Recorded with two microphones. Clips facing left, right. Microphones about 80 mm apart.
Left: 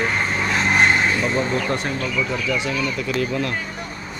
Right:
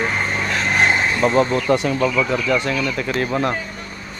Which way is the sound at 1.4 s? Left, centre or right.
Right.